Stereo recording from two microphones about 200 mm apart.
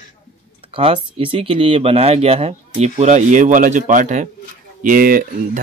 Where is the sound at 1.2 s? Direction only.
25° right (ahead or behind).